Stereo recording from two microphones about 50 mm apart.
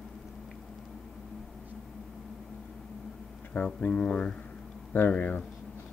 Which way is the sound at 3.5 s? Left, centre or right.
Left.